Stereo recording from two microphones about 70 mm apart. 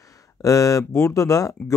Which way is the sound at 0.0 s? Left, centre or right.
Left.